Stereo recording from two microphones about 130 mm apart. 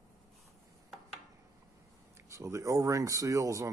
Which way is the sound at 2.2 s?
20° right (ahead or behind).